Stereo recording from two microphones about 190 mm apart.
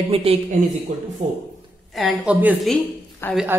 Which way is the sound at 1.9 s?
5° right (ahead or behind).